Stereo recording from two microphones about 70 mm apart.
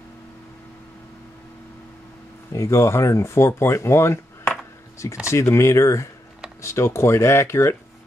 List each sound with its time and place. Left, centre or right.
2.5 s speech: left